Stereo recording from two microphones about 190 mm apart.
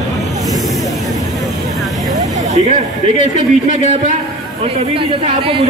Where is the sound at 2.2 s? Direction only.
40° right (ahead or behind).